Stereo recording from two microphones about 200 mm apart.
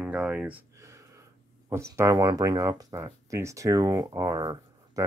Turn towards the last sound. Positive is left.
turn(degrees=-20)  # may be behind; listen again after turning